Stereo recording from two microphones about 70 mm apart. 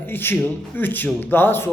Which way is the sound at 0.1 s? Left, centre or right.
Left.